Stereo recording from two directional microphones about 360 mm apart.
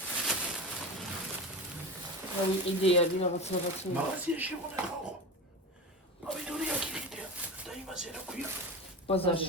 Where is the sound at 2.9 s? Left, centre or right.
Centre.